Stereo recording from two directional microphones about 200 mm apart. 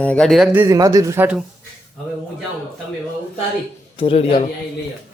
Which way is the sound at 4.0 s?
25° left (ahead or behind).